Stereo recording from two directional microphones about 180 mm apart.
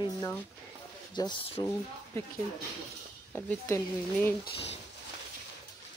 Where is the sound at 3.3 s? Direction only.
15° left (ahead or behind).